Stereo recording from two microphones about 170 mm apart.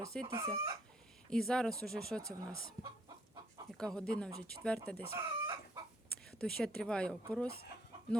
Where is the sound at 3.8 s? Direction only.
5° left (ahead or behind).